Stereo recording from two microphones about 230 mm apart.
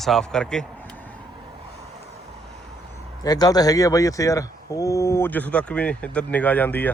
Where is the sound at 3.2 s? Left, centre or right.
Centre.